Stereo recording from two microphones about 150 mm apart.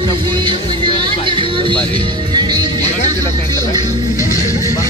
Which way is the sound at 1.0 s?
35° right (ahead or behind).